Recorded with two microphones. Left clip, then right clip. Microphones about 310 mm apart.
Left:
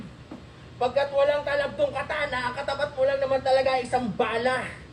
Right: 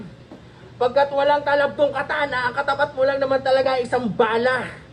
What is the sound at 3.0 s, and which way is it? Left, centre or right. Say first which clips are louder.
Speech: even; right.